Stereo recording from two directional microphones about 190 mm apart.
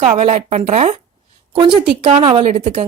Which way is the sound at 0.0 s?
35° right (ahead or behind).